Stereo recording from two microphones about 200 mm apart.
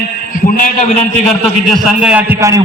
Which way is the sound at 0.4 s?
40° left (ahead or behind).